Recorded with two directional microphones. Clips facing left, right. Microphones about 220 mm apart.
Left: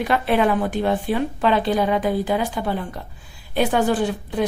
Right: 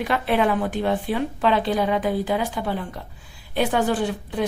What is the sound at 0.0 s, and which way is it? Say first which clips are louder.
A woman's voice: left 2 dB; 40° left (ahead or behind).